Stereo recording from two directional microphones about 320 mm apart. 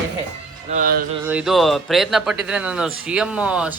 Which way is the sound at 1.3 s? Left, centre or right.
Centre.